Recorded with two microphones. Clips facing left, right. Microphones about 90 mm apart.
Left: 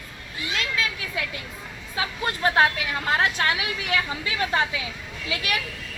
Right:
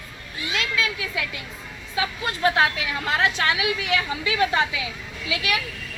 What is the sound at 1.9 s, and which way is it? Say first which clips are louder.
A woman's voice: right 1 dB; 35° left (ahead or behind).